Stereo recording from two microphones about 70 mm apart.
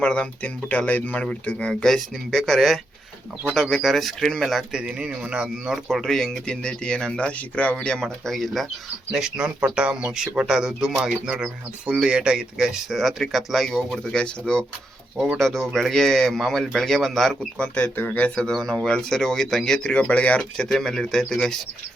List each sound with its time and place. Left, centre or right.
0.0 s speech: centre
4.7 s speech: centre
6.0 s speech: centre
9.1 s speech: centre
17.6 s speech: centre
18.5 s speech: centre